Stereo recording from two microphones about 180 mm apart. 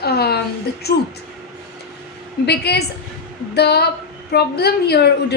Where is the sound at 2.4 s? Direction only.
65° left (ahead or behind).